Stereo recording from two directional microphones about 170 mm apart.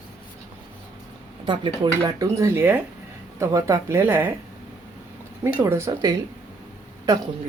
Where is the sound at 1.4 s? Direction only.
30° right (ahead or behind); by 4.3 s 10° right (ahead or behind).